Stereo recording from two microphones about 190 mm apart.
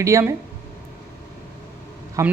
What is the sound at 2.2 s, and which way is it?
Speech, 15° right (ahead or behind).